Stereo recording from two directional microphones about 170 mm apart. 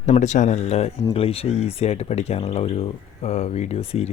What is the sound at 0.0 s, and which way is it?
Speech, 45° left (ahead or behind).